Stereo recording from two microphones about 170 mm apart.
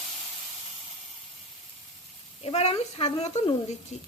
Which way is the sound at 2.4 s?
40° left (ahead or behind).